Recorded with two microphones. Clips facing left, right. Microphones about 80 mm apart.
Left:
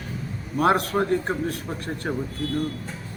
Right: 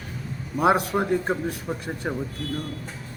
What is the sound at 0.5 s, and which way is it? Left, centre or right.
A man's voice, centre.